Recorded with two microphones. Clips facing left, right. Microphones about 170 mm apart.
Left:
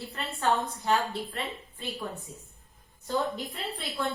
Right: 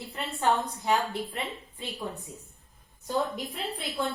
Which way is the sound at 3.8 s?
20° right (ahead or behind).